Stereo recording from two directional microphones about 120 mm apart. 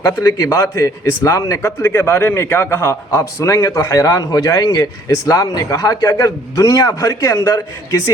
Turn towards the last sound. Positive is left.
turn(degrees=25)  # may be behind; listen again after turning